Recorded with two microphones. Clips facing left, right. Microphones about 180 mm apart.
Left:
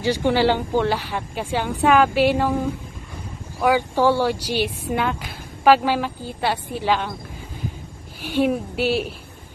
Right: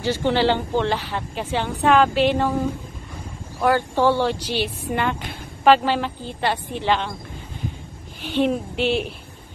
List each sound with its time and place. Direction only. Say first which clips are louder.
0.0 s speech: left 1 dB; 10° left (ahead or behind)
3.6 s speech: left 1 dB; 10° left (ahead or behind)
8.2 s a woman's voice: left 1 dB; 10° left (ahead or behind)